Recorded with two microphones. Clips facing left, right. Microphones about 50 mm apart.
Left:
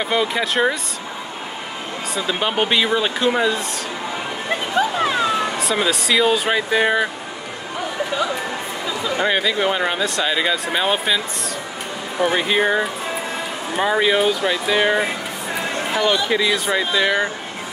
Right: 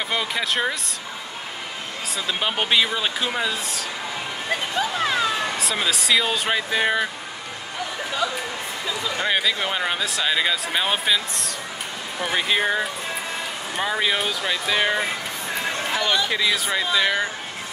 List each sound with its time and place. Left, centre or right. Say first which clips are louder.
0.0 s speech: left 5 dB; centre
2.1 s speech: left 4 dB; centre
4.7 s a sound: left 5 dB; centre
5.6 s speech: left 4 dB; centre
9.3 s speech: left 2 dB; centre